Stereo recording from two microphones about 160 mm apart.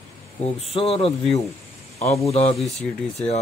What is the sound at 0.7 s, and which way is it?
Speech, 35° left (ahead or behind).